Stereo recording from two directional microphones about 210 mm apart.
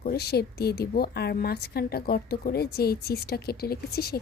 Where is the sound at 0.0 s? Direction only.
50° left (ahead or behind).